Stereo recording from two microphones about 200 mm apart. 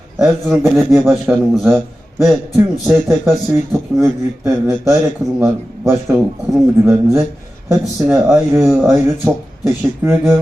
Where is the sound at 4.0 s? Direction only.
15° right (ahead or behind).